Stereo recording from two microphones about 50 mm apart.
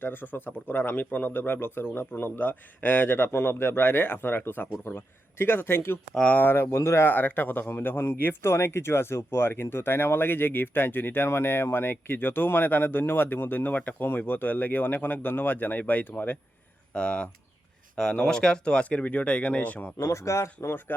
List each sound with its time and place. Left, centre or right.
0.0 s speech: left
2.4 s speech: left
6.7 s speech: left
7.0 s speech: left
16.9 s speech: centre
20.0 s speech: left